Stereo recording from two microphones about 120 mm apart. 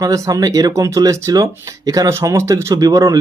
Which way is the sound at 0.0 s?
30° right (ahead or behind).